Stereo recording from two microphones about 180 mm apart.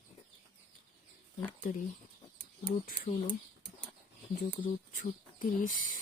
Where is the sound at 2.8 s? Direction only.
50° left (ahead or behind).